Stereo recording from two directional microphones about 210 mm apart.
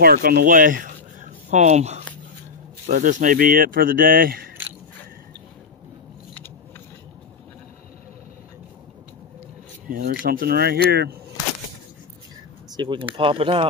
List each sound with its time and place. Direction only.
0.0 s speech: 45° right (ahead or behind)
9.8 s speech: 40° right (ahead or behind)
12.7 s speech: 20° right (ahead or behind)